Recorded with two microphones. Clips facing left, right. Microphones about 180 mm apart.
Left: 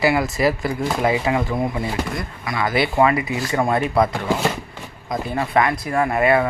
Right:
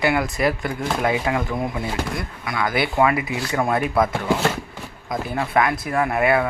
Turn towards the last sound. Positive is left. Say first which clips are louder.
# left 2 dB
turn(degrees=0)  # may be behind; listen again after turning